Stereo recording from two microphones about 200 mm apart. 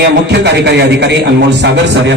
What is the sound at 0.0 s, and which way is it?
A man's voice, 55° right (ahead or behind).